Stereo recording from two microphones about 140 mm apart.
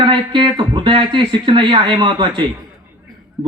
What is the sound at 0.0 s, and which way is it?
A man's voice, 35° right (ahead or behind).